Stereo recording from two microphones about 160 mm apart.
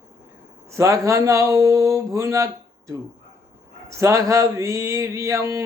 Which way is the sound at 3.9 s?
20° right (ahead or behind).